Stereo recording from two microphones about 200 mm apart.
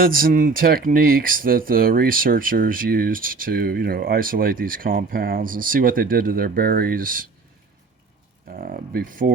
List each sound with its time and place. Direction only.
0.0 s speech: 45° right (ahead or behind)
8.4 s speech: 45° right (ahead or behind)